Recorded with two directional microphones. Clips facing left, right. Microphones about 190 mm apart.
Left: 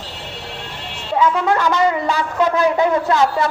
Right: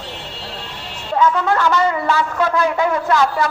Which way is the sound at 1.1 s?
15° left (ahead or behind).